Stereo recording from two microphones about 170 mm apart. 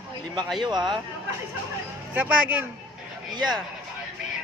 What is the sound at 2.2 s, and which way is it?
Speech, 10° right (ahead or behind).